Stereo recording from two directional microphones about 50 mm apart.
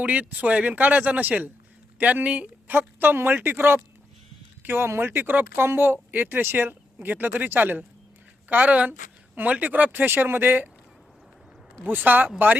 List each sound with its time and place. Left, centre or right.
0.0 s a woman's voice: right
2.7 s speech: right
6.1 s a woman's voice: right
8.4 s a woman's voice: right
11.8 s a woman's voice: right